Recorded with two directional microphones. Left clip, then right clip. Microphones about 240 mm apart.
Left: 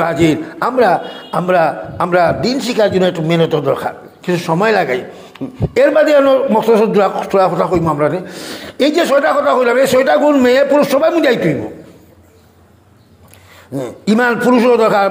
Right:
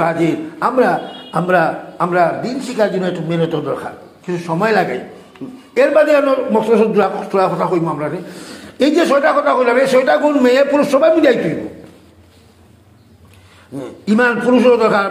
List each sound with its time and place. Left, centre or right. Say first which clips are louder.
0.0 s a man's voice: left 2 dB; left
13.7 s a man's voice: left 1 dB; left